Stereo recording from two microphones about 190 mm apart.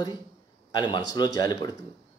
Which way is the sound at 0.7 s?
20° left (ahead or behind).